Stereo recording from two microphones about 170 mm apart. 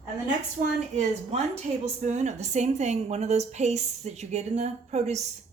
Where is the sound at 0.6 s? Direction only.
50° right (ahead or behind).